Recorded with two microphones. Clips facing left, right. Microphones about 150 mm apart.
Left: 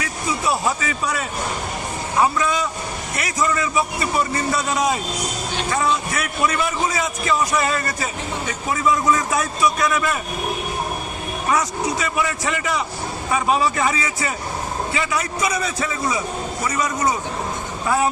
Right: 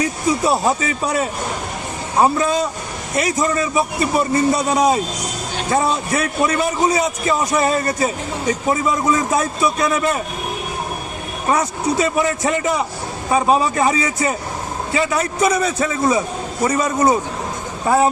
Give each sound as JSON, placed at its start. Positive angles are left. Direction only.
{"t": 0.0, "sound": "a man's voice", "side_deg": -30}
{"t": 5.7, "sound": "a man's voice", "side_deg": -30}
{"t": 11.4, "sound": "a man's voice", "side_deg": -30}